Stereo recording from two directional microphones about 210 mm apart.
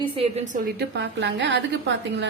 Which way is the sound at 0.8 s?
55° right (ahead or behind).